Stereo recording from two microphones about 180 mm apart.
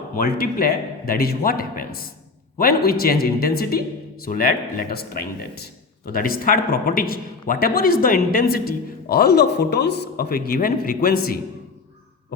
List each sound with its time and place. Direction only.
0.2 s a man's voice: 55° left (ahead or behind)